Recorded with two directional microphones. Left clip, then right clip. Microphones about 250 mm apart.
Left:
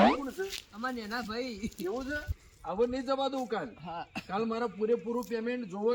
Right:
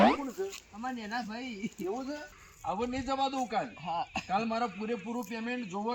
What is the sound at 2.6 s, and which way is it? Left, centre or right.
A man's voice, centre.